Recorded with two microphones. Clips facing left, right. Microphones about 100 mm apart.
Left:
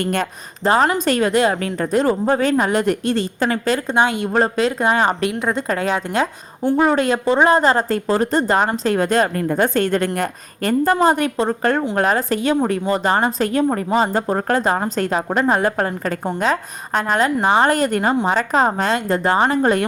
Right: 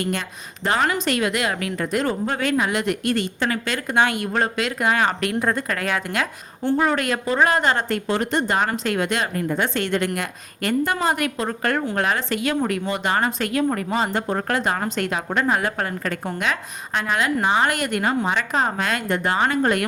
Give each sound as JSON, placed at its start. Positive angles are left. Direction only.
{"t": 0.0, "sound": "a woman's voice", "side_deg": 50}
{"t": 0.6, "sound": "speech", "side_deg": 30}
{"t": 5.3, "sound": "a woman's voice", "side_deg": 10}
{"t": 5.5, "sound": "a woman's voice", "side_deg": 25}
{"t": 6.6, "sound": "a woman's voice", "side_deg": 10}
{"t": 6.8, "sound": "speech", "side_deg": 30}